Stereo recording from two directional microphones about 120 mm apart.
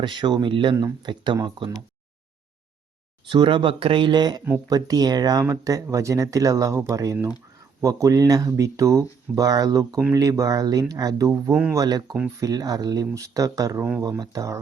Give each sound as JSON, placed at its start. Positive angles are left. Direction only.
{"t": 0.0, "sound": "speech", "side_deg": -40}
{"t": 3.2, "sound": "speech", "side_deg": -45}